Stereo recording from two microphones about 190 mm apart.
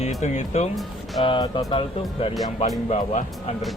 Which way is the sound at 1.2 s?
25° left (ahead or behind).